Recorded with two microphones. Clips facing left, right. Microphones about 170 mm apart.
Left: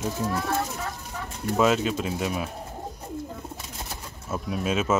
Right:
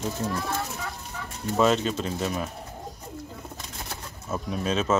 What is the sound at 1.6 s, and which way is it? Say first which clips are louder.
Speech: even; 5° left (ahead or behind).